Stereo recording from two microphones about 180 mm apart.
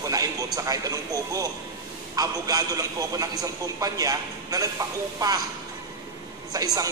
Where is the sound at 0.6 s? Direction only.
20° right (ahead or behind).